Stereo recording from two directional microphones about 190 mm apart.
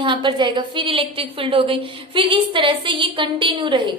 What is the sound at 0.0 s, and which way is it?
A woman's voice, 25° right (ahead or behind).